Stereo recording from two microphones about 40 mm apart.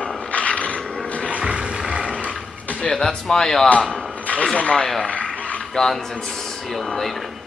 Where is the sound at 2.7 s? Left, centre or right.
Left.